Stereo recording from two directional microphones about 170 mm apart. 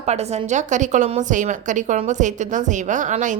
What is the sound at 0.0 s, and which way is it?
Speech, 40° right (ahead or behind).